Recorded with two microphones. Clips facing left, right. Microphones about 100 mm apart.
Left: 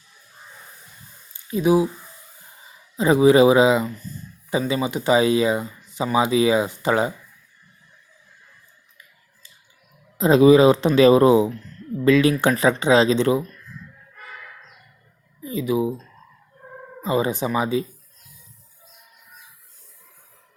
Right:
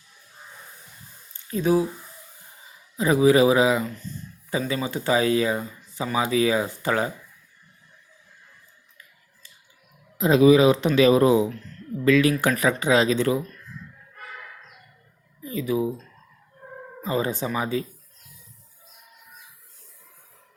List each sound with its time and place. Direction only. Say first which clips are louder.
1.3 s speech: left 3 dB; 10° left (ahead or behind)
3.0 s speech: left 3 dB; 25° left (ahead or behind)
10.2 s speech: left 3 dB; 35° left (ahead or behind)
15.4 s speech: left 3 dB; 20° left (ahead or behind)
17.0 s speech: left 4 dB; 15° left (ahead or behind)